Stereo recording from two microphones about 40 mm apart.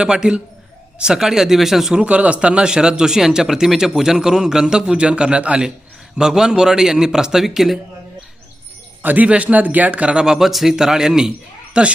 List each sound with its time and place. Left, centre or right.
0.0 s a man's voice: right
2.0 s speech: right
6.1 s a man's voice: centre
9.0 s bird: right
9.2 s speech: right
10.2 s a man's voice: centre; by 11.9 s right